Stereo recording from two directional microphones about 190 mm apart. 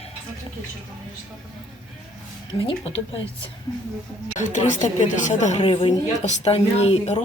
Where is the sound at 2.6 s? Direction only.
30° left (ahead or behind).